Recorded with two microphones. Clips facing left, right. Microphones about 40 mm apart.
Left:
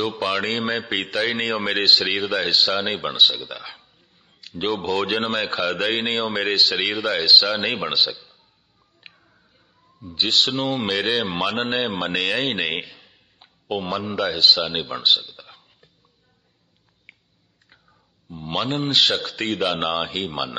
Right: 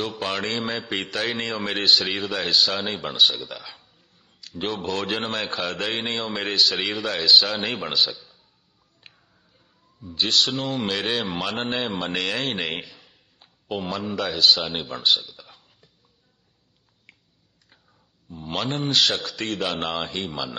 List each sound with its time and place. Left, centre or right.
0.2 s speech: centre
0.5 s a man's voice: left
1.3 s a man's voice: left; by 8.4 s centre
9.0 s music: left
10.0 s a man's voice: centre
10.9 s speech: centre
11.6 s a man's voice: left
12.1 s a man's voice: centre
12.8 s a sound: centre
14.1 s speech: left
17.1 s a sound: left
18.4 s a man's voice: centre